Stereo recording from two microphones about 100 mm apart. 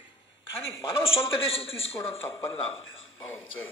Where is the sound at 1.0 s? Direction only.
70° left (ahead or behind).